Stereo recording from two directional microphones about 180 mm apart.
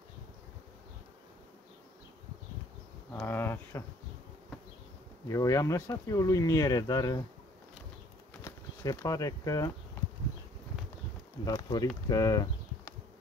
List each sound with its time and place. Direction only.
3.1 s speech: 10° left (ahead or behind)
5.3 s speech: 20° left (ahead or behind)
8.5 s speech: 20° left (ahead or behind)
11.4 s speech: 20° left (ahead or behind)
12.1 s a sound: 20° left (ahead or behind)